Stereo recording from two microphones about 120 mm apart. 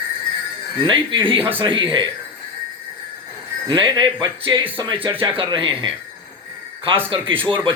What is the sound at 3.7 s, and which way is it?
Speech, 40° right (ahead or behind).